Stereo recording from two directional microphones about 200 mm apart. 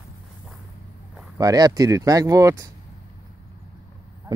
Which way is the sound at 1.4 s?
20° right (ahead or behind).